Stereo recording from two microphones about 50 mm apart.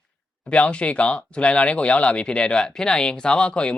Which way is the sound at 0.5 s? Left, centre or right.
Left.